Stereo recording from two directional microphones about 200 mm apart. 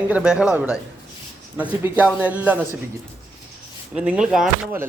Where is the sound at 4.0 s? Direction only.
5° right (ahead or behind).